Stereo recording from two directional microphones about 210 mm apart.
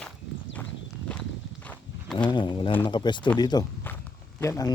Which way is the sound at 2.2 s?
20° left (ahead or behind).